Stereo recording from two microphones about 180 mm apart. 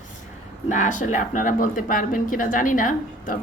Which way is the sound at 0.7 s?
45° left (ahead or behind).